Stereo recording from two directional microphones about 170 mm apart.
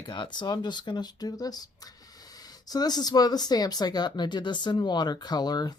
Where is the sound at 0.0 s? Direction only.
30° left (ahead or behind).